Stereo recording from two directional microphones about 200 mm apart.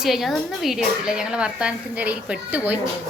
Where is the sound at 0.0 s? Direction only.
Centre (ahead or behind).